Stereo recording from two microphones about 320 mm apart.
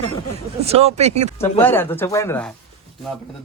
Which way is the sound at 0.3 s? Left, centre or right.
Centre.